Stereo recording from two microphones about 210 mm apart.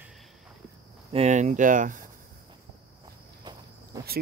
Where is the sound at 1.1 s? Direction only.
30° right (ahead or behind).